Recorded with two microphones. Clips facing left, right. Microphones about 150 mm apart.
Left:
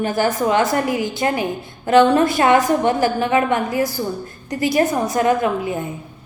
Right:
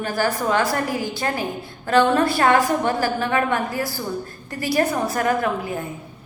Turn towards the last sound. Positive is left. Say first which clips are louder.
# left 3 dB
turn(degrees=20)  # may be behind; listen again after turning